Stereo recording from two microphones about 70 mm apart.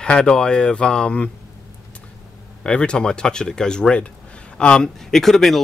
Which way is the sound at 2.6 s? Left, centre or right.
Centre.